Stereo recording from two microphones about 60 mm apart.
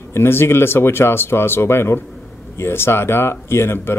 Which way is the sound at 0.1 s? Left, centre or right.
Left.